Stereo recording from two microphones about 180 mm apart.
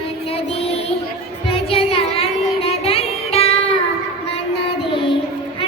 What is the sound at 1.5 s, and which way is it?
Child singing, 30° left (ahead or behind).